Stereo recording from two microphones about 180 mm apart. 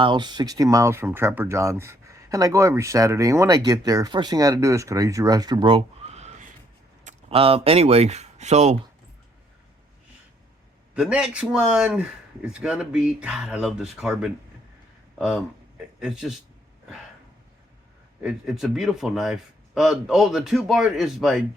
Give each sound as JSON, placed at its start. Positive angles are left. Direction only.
{"t": 0.0, "sound": "speech", "side_deg": -25}
{"t": 10.9, "sound": "a man's voice", "side_deg": -5}
{"t": 16.0, "sound": "speech", "side_deg": -5}
{"t": 18.2, "sound": "a man's voice", "side_deg": -5}